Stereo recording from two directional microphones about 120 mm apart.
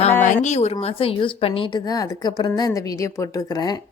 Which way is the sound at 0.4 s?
65° left (ahead or behind).